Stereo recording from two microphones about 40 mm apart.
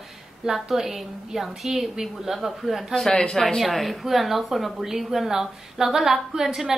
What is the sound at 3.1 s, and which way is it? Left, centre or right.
Speech, left.